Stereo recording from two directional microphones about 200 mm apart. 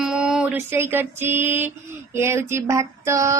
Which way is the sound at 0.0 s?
5° right (ahead or behind).